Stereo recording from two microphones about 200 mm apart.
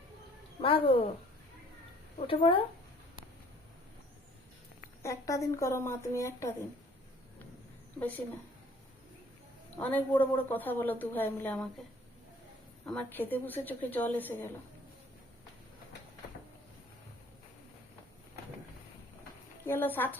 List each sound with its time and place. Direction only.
0.6 s speech: 25° left (ahead or behind)
2.1 s speech: 30° left (ahead or behind)
5.0 s a woman's voice: 15° left (ahead or behind)
7.9 s a woman's voice: 10° left (ahead or behind)
9.8 s a woman's voice: 10° left (ahead or behind)
12.8 s a woman's voice: 5° left (ahead or behind)
19.6 s a woman's voice: 10° left (ahead or behind)